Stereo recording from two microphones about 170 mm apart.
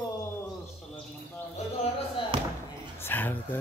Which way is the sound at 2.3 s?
30° right (ahead or behind).